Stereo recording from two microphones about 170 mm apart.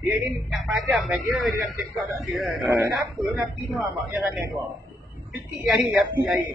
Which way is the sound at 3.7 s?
Centre (ahead or behind).